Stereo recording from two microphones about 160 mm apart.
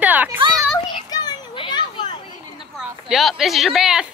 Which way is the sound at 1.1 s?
25° left (ahead or behind).